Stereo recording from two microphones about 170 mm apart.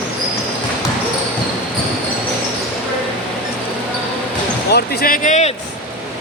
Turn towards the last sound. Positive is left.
turn(degrees=45)  # may be behind; listen again after turning